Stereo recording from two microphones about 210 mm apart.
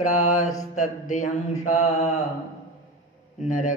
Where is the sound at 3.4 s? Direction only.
35° left (ahead or behind).